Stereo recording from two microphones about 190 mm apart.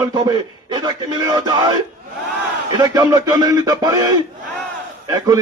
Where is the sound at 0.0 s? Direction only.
20° right (ahead or behind).